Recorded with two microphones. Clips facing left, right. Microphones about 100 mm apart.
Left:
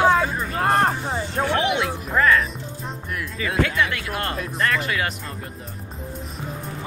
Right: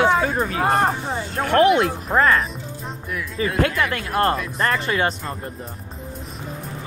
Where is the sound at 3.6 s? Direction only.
45° right (ahead or behind).